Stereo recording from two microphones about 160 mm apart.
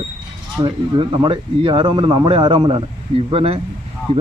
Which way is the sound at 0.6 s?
30° right (ahead or behind).